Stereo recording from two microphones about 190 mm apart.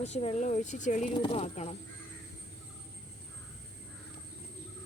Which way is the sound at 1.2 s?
30° left (ahead or behind).